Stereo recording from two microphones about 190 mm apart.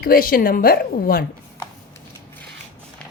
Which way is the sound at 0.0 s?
50° left (ahead or behind).